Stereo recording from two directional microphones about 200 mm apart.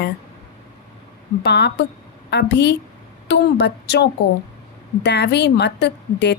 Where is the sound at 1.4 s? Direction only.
60° left (ahead or behind).